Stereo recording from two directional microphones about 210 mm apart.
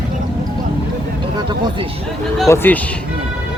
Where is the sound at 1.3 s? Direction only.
20° right (ahead or behind).